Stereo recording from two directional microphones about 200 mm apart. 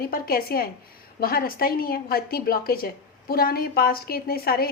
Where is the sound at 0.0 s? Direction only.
50° left (ahead or behind).